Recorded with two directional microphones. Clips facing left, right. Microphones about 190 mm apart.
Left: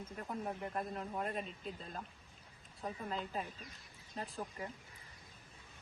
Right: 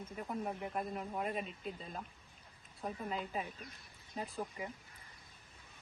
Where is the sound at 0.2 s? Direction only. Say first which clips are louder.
Right 2 dB; 5° right (ahead or behind).